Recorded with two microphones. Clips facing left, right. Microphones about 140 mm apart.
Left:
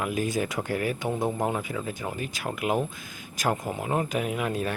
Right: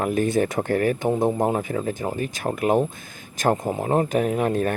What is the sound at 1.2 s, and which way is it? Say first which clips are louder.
Speech: right 5 dB; 25° right (ahead or behind).